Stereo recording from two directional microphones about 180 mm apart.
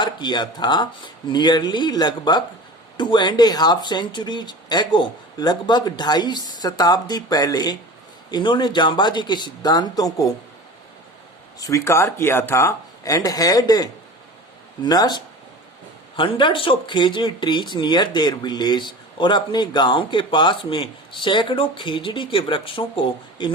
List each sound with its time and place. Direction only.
0.0 s speech: 25° left (ahead or behind)
11.6 s speech: 15° left (ahead or behind)